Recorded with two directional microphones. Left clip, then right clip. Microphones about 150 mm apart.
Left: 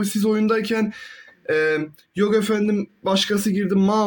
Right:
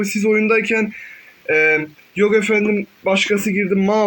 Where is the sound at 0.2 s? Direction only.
35° left (ahead or behind).